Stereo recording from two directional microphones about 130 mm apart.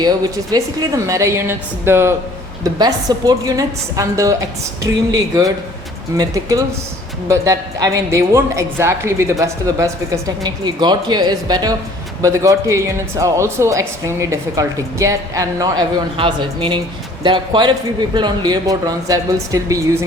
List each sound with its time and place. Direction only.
0.0 s speech: 30° right (ahead or behind)
2.6 s speech: 30° right (ahead or behind)
16.1 s speech: 40° right (ahead or behind)